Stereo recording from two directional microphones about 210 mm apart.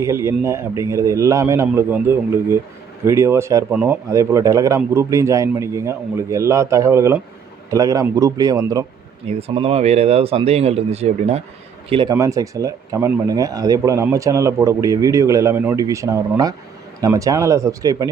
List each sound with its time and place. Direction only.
0.0 s speech: 15° right (ahead or behind)
9.4 s speech: 25° right (ahead or behind)